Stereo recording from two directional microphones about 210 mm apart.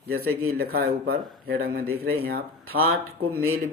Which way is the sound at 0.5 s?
45° right (ahead or behind).